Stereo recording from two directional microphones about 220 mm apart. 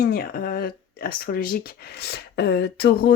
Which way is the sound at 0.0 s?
45° left (ahead or behind).